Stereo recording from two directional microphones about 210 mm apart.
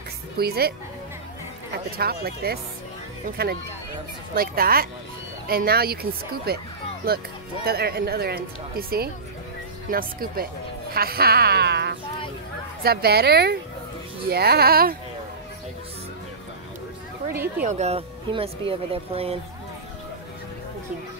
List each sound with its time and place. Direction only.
0.4 s speech: 50° right (ahead or behind)
1.9 s speech: 45° right (ahead or behind)
7.6 s speech: 50° right (ahead or behind)
17.3 s speech: 10° right (ahead or behind)
17.6 s speech: 30° right (ahead or behind)